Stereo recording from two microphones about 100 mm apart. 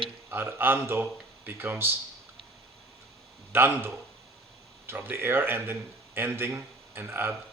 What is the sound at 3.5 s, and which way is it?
Speech, 20° right (ahead or behind).